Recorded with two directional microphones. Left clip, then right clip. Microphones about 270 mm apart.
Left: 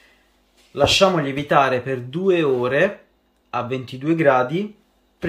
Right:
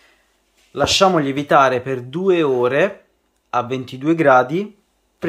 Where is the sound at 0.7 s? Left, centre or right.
Centre.